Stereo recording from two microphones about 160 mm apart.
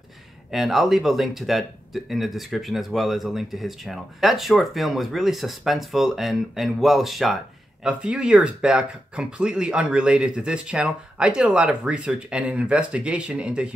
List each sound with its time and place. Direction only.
0.5 s speech: centre (ahead or behind)